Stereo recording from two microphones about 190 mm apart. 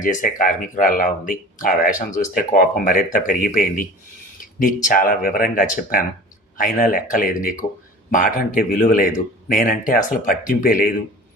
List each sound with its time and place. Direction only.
0.0 s speech: 45° left (ahead or behind)